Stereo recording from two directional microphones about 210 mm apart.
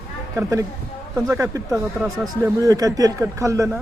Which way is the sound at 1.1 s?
15° right (ahead or behind).